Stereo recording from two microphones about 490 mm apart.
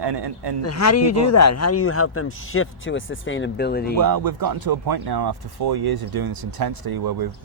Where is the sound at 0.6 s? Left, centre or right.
Left.